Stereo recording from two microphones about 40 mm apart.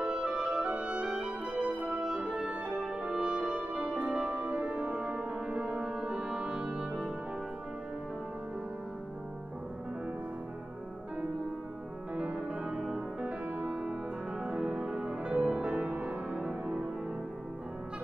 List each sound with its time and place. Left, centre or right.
0.0 s music: right
2.9 s brass instrument: right
6.0 s music: right
12.2 s music: right
14.4 s music: right
16.4 s music: right